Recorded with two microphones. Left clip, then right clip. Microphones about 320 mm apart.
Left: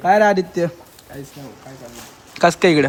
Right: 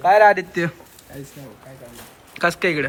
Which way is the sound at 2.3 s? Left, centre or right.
Centre.